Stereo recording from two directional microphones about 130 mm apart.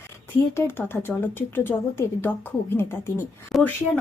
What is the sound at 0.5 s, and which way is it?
Speech, 15° left (ahead or behind).